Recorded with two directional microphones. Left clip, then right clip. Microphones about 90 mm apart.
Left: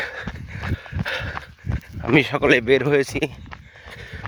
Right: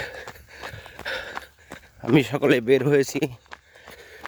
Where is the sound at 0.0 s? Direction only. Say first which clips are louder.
Left 5 dB; 55° right (ahead or behind).